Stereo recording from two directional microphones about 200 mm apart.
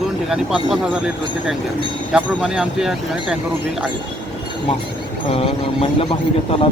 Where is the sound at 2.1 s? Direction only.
5° right (ahead or behind).